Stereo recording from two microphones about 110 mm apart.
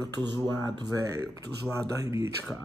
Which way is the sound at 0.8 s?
30° right (ahead or behind).